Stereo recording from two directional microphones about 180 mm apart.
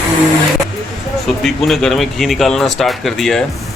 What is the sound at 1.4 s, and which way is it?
Speech, centre (ahead or behind).